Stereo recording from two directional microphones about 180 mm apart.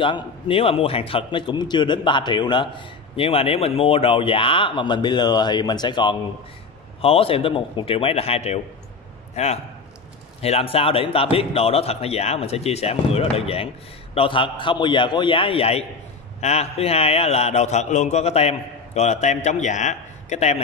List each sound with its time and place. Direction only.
0.0 s a man's voice: 30° left (ahead or behind)